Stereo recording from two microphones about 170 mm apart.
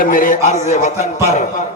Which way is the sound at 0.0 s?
55° left (ahead or behind).